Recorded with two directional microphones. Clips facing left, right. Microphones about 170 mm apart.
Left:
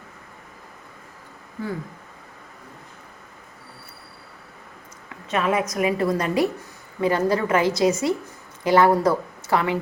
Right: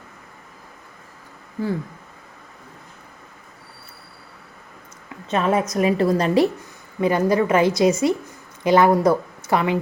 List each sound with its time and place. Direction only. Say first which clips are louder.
5.3 s a woman's voice: right 2 dB; 30° right (ahead or behind)
7.0 s a woman's voice: right 2 dB; 20° right (ahead or behind)